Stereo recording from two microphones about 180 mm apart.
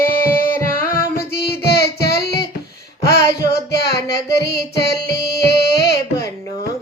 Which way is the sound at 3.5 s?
65° left (ahead or behind).